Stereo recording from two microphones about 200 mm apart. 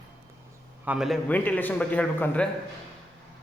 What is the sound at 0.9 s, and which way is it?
Speech, centre (ahead or behind).